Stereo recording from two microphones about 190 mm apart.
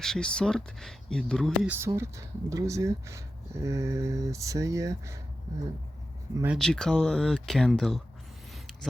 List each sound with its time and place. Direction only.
0.0 s speech: 5° left (ahead or behind)
1.7 s speech: 15° right (ahead or behind)
6.6 s speech: 5° left (ahead or behind)